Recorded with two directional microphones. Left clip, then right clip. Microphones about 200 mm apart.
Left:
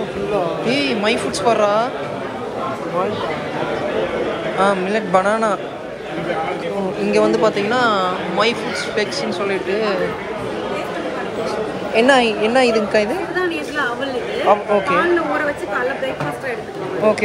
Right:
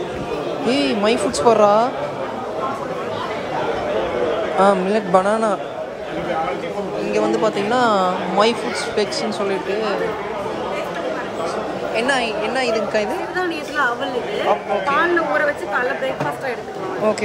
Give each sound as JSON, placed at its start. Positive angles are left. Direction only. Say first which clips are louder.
{"t": 0.7, "sound": "speech", "louder": "right 4 dB", "side_deg": -20}
{"t": 4.6, "sound": "speech", "louder": "right 1 dB", "side_deg": -20}
{"t": 7.1, "sound": "speech", "louder": "left 3 dB", "side_deg": -10}
{"t": 11.9, "sound": "a woman's voice", "louder": "left 6 dB", "side_deg": -5}
{"t": 14.5, "sound": "a woman's voice", "louder": "left 4 dB", "side_deg": 0}